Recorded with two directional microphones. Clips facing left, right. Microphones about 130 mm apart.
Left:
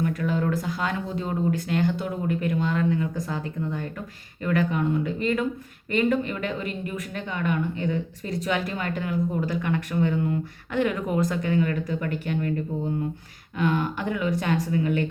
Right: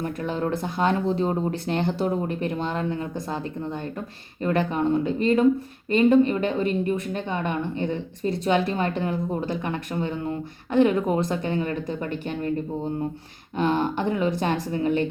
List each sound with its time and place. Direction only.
0.0 s a woman's voice: 30° right (ahead or behind)
13.6 s a woman's voice: 30° right (ahead or behind)